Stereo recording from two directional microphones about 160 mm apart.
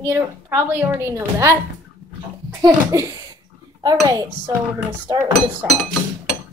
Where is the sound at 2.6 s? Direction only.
20° right (ahead or behind).